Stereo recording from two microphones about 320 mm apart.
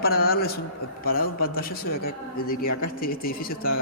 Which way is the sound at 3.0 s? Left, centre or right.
Left.